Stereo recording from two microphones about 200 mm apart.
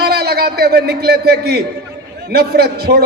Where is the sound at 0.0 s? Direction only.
50° right (ahead or behind).